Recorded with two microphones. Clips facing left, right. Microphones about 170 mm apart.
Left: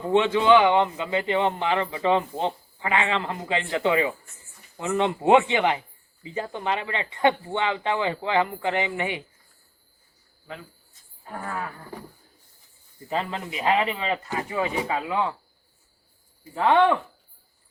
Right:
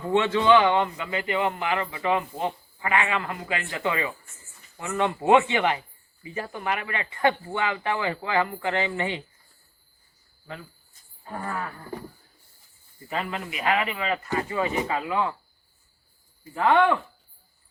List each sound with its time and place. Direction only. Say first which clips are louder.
0.1 s a man's voice: left 1 dB; 15° left (ahead or behind)
11.3 s wild animals: even; 5° left (ahead or behind)
13.1 s a man's voice: left 2 dB; 30° left (ahead or behind)
16.6 s a man's voice: left 1 dB; 20° left (ahead or behind)